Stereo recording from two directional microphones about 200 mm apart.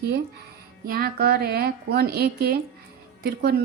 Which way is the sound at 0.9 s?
50° right (ahead or behind).